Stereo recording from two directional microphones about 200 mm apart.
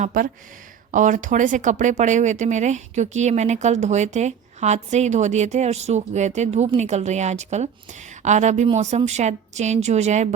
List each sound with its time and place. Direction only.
0.0 s speech: 45° right (ahead or behind)